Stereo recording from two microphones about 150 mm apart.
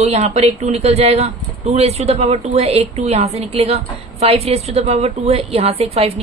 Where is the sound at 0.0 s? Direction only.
45° right (ahead or behind).